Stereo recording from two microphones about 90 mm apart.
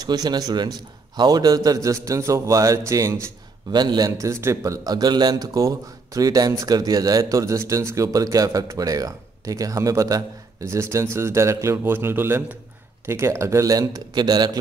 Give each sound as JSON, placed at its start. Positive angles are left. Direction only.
{"t": 0.0, "sound": "a man's voice", "side_deg": -50}
{"t": 3.7, "sound": "a man's voice", "side_deg": -50}
{"t": 4.2, "sound": "a man's voice", "side_deg": -30}